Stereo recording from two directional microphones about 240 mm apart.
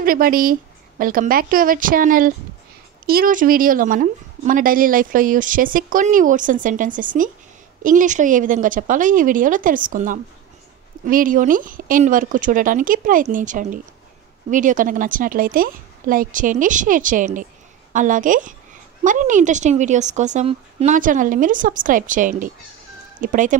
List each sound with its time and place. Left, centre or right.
0.0 s speech: right